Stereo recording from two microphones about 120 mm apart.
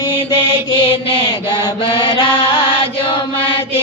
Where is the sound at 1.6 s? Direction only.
45° left (ahead or behind).